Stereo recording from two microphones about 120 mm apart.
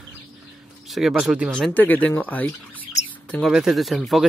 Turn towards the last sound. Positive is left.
turn(degrees=0)  # may be behind; listen again after turning